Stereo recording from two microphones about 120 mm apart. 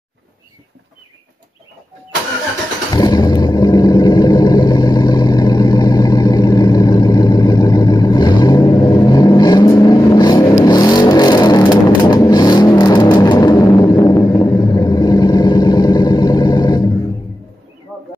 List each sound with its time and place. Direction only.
2.9 s vehicle: 35° left (ahead or behind)